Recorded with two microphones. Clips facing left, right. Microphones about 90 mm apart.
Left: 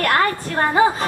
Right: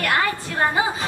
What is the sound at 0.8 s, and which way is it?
Speech, 60° left (ahead or behind).